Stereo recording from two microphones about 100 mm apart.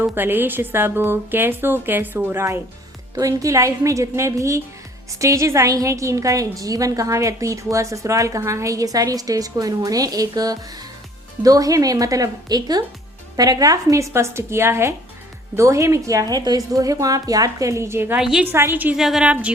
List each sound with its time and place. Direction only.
0.0 s a woman's voice: 20° right (ahead or behind)
3.2 s a woman's voice: 35° right (ahead or behind)
18.2 s a woman's voice: 5° right (ahead or behind)
18.4 s a woman's voice: 25° right (ahead or behind)
18.9 s a woman's voice: 5° right (ahead or behind)